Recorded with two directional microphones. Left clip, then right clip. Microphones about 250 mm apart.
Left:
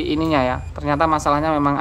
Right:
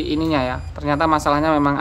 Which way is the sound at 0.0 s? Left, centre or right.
Centre.